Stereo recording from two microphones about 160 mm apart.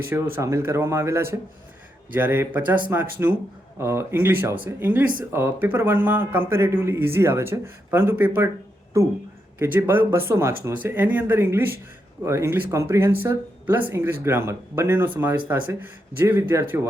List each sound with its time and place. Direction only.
0.3 s speech: 15° right (ahead or behind)